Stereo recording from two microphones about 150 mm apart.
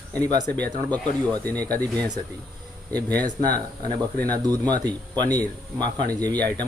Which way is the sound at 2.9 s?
10° left (ahead or behind).